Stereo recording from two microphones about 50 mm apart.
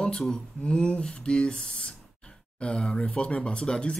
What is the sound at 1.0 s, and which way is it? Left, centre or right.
Speech, centre.